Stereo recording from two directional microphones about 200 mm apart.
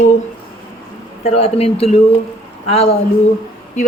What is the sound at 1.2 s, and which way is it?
Speech, 30° left (ahead or behind).